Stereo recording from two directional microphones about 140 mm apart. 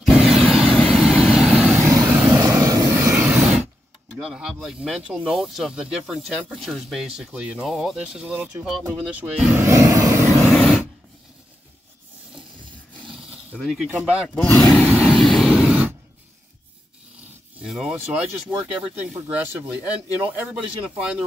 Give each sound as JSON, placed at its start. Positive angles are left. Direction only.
{"t": 0.0, "sound": "vehicle", "side_deg": 0}
{"t": 2.3, "sound": "vehicle", "side_deg": -15}
{"t": 4.1, "sound": "speech", "side_deg": -5}
{"t": 9.7, "sound": "vehicle", "side_deg": -20}
{"t": 10.4, "sound": "a sound", "side_deg": 5}
{"t": 13.0, "sound": "roaring cats", "side_deg": 0}
{"t": 13.8, "sound": "speech", "side_deg": -10}
{"t": 14.9, "sound": "a sound", "side_deg": -5}
{"t": 17.6, "sound": "speech", "side_deg": -5}